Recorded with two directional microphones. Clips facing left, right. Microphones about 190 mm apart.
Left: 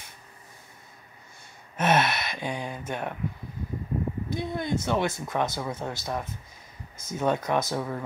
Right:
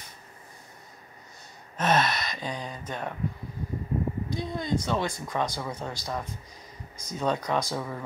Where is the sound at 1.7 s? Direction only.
10° left (ahead or behind).